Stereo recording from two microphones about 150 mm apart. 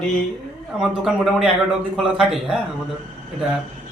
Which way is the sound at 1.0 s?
5° right (ahead or behind).